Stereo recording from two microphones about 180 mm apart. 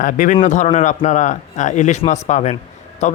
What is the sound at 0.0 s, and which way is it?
Speech, 45° left (ahead or behind).